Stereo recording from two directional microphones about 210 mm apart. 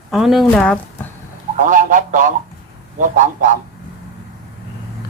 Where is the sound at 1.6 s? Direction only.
40° right (ahead or behind).